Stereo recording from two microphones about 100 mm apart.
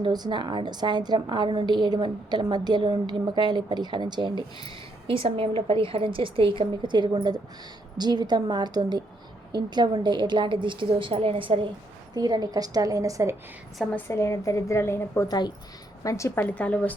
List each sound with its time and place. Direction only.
0.0 s a woman's voice: 50° right (ahead or behind)
5.0 s a woman's voice: 65° right (ahead or behind)
12.1 s a woman's voice: 40° right (ahead or behind)
14.1 s a woman's voice: 30° left (ahead or behind)
15.3 s a woman's voice: 45° left (ahead or behind)
16.0 s a woman's voice: 30° left (ahead or behind)
16.4 s a woman's voice: 15° left (ahead or behind)